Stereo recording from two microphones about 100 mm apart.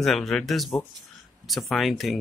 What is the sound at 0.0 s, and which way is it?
Speech, centre (ahead or behind).